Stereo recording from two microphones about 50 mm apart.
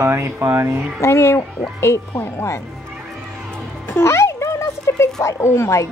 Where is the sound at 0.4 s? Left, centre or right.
Right.